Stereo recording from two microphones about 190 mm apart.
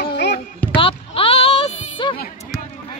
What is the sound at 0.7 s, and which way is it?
Music, 30° left (ahead or behind).